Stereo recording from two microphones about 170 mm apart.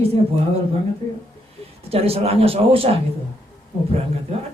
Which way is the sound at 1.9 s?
35° right (ahead or behind).